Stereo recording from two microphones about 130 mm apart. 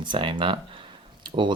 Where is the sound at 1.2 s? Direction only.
35° right (ahead or behind).